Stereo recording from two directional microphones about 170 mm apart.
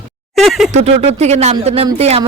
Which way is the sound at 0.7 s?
40° right (ahead or behind).